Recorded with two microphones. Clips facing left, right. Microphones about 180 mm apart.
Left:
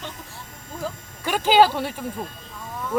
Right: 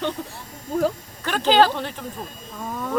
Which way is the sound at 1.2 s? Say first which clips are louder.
Even; 10° left (ahead or behind).